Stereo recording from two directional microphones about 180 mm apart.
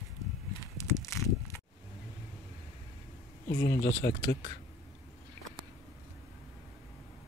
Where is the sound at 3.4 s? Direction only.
65° left (ahead or behind); by 4.3 s 80° left.